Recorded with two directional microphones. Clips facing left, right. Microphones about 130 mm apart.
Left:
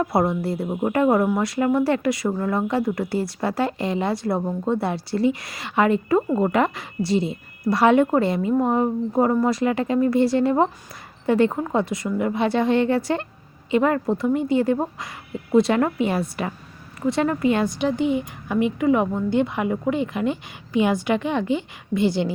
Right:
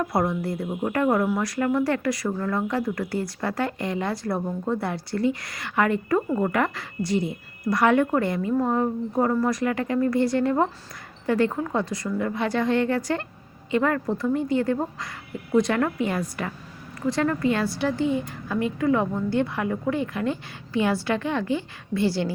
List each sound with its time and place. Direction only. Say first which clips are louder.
0.0 s a woman's voice: left 3 dB; 25° left (ahead or behind)